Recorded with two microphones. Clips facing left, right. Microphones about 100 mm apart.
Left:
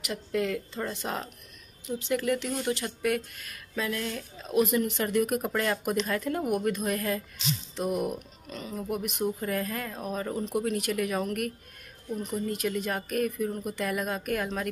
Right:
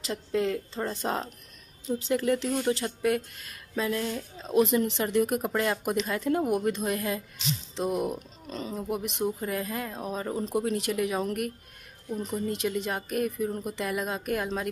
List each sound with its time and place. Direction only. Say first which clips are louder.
0.0 s speech: right 2 dB; 30° right (ahead or behind)